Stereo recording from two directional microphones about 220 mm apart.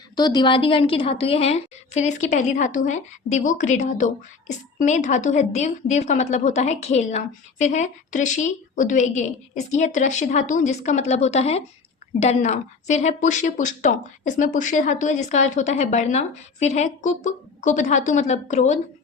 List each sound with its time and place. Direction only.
0.2 s a woman's voice: 20° left (ahead or behind)